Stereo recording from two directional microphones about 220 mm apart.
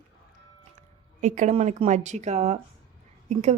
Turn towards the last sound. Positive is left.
turn(degrees=-30)  # may be behind; listen again after turning